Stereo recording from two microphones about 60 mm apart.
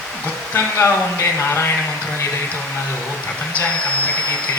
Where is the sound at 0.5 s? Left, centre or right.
Left.